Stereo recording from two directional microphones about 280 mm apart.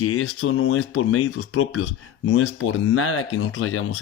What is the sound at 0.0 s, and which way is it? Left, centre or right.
Speech, left.